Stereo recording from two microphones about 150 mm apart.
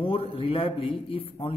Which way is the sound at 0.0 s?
40° left (ahead or behind).